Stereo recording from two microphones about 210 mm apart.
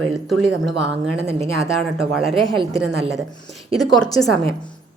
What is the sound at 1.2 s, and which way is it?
Speech, 30° right (ahead or behind).